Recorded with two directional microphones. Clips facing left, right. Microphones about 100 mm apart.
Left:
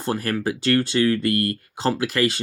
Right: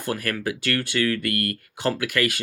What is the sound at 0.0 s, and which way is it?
Speech, 30° left (ahead or behind).